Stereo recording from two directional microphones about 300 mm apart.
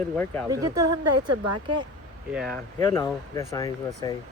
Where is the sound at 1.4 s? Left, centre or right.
Right.